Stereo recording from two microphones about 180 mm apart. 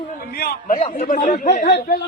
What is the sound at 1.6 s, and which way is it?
Speech, 70° left (ahead or behind).